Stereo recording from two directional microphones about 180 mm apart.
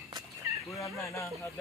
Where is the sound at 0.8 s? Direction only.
15° left (ahead or behind).